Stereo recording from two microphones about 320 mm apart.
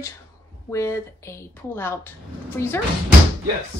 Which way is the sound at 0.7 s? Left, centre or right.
Centre.